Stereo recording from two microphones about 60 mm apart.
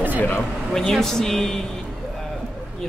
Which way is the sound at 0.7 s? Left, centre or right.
Centre.